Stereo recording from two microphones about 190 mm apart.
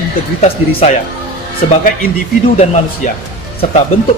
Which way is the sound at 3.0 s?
40° left (ahead or behind).